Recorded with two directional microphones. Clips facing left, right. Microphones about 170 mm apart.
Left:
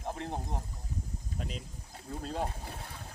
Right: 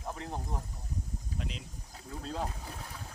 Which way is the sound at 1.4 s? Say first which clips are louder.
Left 1 dB; 45° left (ahead or behind).